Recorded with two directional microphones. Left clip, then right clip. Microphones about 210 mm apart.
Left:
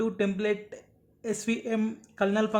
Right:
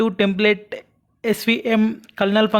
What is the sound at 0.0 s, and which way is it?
A woman's voice, 40° right (ahead or behind).